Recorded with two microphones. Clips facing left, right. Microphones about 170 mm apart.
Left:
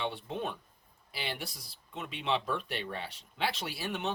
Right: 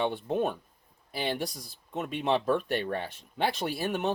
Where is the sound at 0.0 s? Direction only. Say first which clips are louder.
Right 7 dB; 50° right (ahead or behind).